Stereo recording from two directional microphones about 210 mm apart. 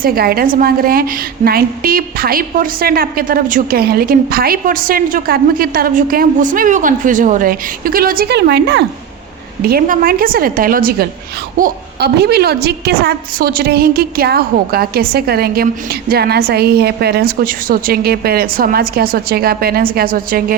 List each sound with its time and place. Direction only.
0.0 s a woman's voice: 45° right (ahead or behind)
9.6 s a woman's voice: 45° right (ahead or behind)